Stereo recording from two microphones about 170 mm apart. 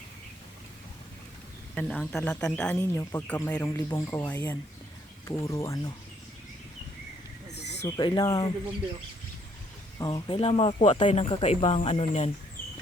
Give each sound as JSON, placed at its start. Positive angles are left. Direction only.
{"t": 1.7, "sound": "speech", "side_deg": 5}
{"t": 7.5, "sound": "a sound", "side_deg": 85}
{"t": 7.9, "sound": "speech", "side_deg": 25}
{"t": 10.0, "sound": "speech", "side_deg": 25}